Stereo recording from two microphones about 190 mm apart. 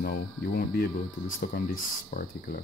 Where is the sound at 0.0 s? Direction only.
50° left (ahead or behind).